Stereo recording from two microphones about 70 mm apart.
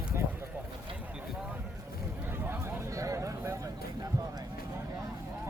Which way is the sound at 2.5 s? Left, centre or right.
Right.